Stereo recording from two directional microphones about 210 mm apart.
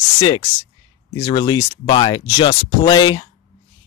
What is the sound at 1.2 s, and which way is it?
Speech, 20° left (ahead or behind).